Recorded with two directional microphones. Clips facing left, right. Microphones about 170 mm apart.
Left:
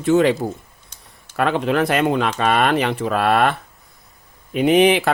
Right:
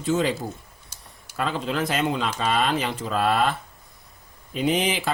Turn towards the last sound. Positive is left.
turn(degrees=65)  # may be behind; listen again after turning